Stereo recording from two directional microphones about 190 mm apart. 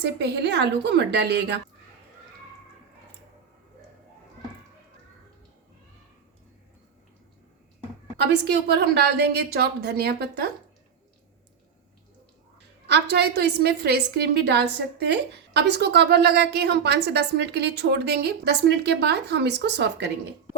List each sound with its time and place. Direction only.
0.0 s a woman's voice: 65° right (ahead or behind)
8.2 s a woman's voice: 60° right (ahead or behind)
12.9 s a woman's voice: 60° right (ahead or behind)